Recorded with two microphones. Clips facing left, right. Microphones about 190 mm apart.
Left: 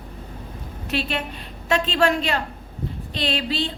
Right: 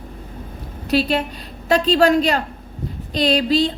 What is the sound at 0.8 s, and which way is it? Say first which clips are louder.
Speech: right 8 dB; 40° right (ahead or behind).